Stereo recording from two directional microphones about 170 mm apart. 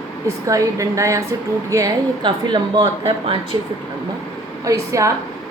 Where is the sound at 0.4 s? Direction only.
20° right (ahead or behind).